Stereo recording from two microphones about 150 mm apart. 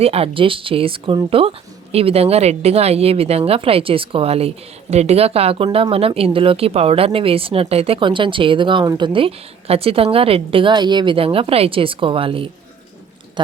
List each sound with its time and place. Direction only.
0.0 s a woman's voice: 40° right (ahead or behind)